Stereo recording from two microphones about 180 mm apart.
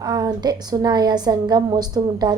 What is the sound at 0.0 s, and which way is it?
A woman's voice, 25° right (ahead or behind).